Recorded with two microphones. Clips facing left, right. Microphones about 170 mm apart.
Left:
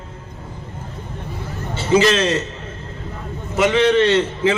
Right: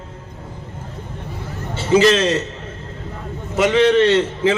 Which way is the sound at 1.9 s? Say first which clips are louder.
Right 2 dB; 35° right (ahead or behind).